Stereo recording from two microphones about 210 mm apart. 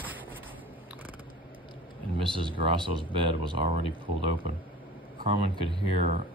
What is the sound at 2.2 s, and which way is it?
Speech, 25° right (ahead or behind).